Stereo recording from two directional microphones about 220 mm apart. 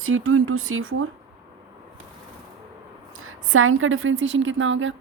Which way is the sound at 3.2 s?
70° right (ahead or behind).